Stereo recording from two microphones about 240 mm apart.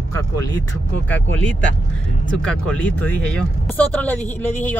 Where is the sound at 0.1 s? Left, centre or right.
Centre.